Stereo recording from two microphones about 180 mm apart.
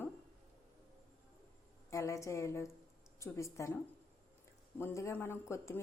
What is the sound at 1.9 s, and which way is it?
A woman's voice, 15° left (ahead or behind).